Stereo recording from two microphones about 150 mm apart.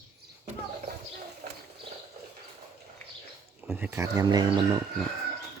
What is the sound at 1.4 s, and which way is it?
Speech, 75° right (ahead or behind).